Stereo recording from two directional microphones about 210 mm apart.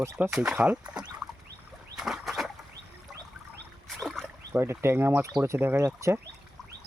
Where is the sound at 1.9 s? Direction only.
Centre (ahead or behind).